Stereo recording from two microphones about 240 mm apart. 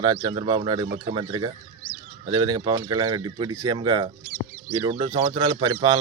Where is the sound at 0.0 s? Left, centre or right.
Centre.